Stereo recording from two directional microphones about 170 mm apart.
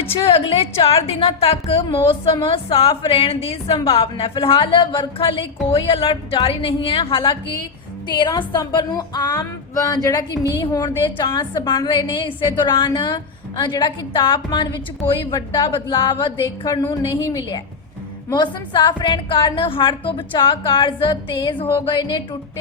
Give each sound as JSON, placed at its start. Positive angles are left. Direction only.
{"t": 0.0, "sound": "a woman's voice", "side_deg": 35}